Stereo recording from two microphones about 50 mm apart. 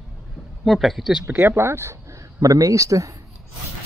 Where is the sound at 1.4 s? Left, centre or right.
Right.